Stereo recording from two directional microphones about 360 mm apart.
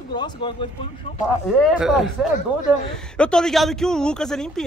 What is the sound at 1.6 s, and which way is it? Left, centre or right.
Speech, centre.